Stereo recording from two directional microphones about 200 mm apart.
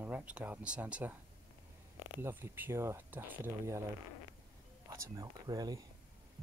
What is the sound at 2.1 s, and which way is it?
Speech, 10° right (ahead or behind).